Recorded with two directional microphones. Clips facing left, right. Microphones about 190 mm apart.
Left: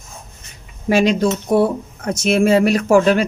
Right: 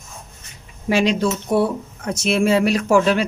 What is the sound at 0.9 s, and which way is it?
Speech, 45° left (ahead or behind).